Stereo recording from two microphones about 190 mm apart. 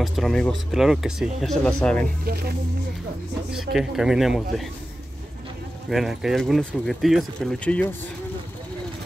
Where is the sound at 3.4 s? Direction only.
Centre (ahead or behind).